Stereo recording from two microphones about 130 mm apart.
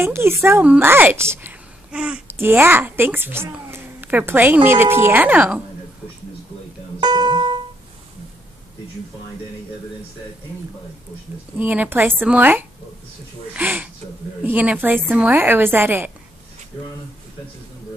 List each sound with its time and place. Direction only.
0.0 s a woman's voice: 20° right (ahead or behind)
7.0 s music: 35° right (ahead or behind)
11.5 s a woman's voice: 10° right (ahead or behind)